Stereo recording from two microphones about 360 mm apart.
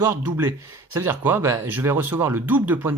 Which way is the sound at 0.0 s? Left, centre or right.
Centre.